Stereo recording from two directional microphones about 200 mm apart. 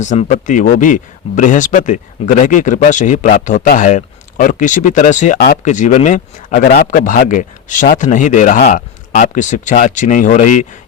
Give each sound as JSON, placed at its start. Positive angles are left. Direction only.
{"t": 0.0, "sound": "speech", "side_deg": 35}